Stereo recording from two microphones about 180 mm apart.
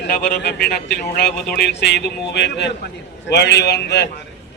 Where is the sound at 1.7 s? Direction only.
70° left (ahead or behind).